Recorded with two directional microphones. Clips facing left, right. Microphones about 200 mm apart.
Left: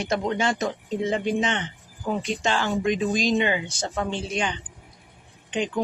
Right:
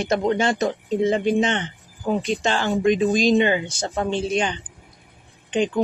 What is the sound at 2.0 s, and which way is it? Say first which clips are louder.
Speech: right 4 dB; 30° right (ahead or behind).